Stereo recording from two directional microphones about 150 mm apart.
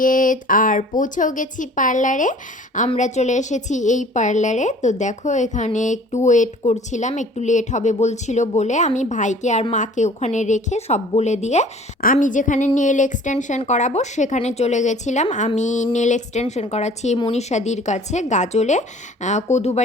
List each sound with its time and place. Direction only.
0.0 s a woman's voice: 65° left (ahead or behind); by 19.8 s 50° left (ahead or behind)